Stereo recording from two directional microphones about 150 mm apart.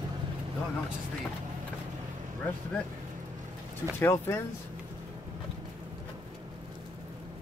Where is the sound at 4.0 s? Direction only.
15° left (ahead or behind).